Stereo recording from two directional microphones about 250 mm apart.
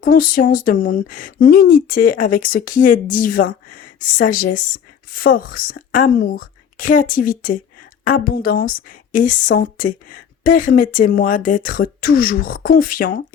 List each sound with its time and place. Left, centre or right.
0.0 s a woman's voice: left